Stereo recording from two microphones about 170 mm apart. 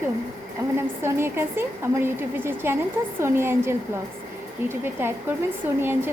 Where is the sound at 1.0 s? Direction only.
15° right (ahead or behind).